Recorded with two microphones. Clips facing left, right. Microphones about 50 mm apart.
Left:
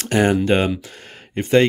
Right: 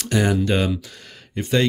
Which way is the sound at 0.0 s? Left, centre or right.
Left.